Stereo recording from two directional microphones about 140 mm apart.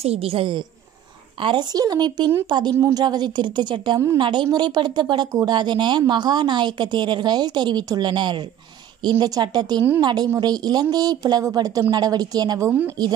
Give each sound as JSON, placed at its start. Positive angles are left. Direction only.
{"t": 0.0, "sound": "a woman's voice", "side_deg": -45}